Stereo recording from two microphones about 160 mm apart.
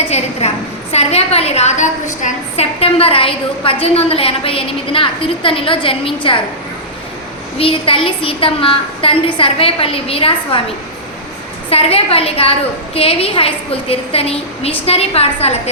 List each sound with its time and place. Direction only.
0.1 s a woman's voice: 40° left (ahead or behind)
7.6 s a woman's voice: 35° left (ahead or behind)
11.7 s a woman's voice: 40° left (ahead or behind)